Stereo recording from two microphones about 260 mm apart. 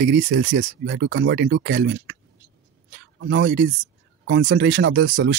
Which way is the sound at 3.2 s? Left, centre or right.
Right.